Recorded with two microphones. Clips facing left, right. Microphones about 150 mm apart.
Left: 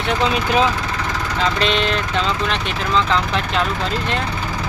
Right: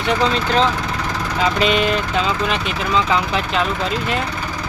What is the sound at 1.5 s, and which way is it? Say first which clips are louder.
Speech: right 4 dB; 5° right (ahead or behind).